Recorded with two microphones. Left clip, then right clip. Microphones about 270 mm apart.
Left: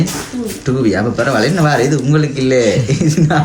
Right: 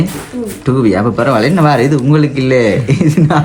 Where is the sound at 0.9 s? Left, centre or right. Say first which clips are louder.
Right 3 dB; centre.